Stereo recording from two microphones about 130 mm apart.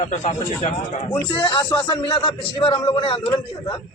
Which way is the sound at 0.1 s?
60° left (ahead or behind).